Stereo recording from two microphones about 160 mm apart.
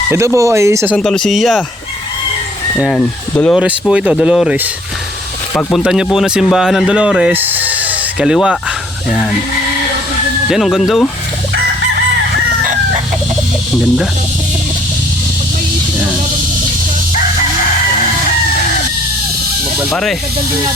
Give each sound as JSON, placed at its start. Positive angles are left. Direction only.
{"t": 0.1, "sound": "speech", "side_deg": -15}
{"t": 0.9, "sound": "speech", "side_deg": 5}
{"t": 2.7, "sound": "speech", "side_deg": 0}
{"t": 3.6, "sound": "speech", "side_deg": -5}
{"t": 10.5, "sound": "speech", "side_deg": 0}
{"t": 19.9, "sound": "speech", "side_deg": 0}